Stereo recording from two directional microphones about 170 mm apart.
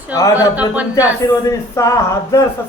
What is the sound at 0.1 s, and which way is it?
A man's voice, 20° left (ahead or behind).